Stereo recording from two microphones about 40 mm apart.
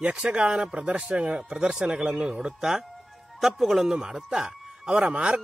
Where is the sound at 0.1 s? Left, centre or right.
Right.